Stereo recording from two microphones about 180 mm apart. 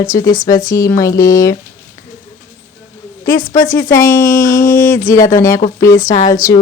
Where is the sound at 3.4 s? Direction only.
50° left (ahead or behind).